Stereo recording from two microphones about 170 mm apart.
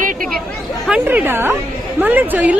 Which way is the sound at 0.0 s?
50° right (ahead or behind).